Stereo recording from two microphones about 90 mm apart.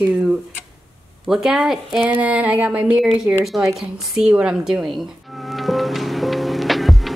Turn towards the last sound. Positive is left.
turn(degrees=0)  # may be behind; listen again after turning